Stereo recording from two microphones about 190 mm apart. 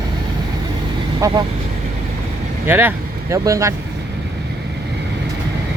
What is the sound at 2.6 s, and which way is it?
Speech, 10° right (ahead or behind).